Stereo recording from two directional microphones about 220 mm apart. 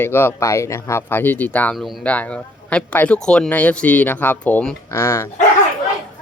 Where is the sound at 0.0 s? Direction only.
10° left (ahead or behind).